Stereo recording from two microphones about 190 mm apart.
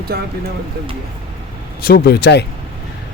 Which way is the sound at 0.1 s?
55° right (ahead or behind).